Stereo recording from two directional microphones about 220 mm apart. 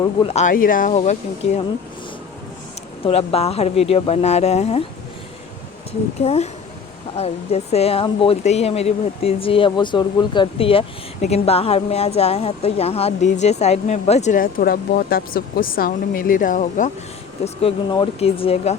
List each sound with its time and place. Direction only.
0.2 s speech: 30° left (ahead or behind)
3.0 s speech: 25° left (ahead or behind)
6.1 s speech: 30° left (ahead or behind)